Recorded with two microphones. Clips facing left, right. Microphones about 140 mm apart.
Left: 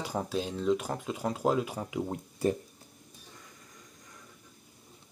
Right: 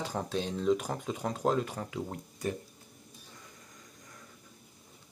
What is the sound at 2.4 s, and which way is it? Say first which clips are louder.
Speech: left 6 dB; 30° left (ahead or behind).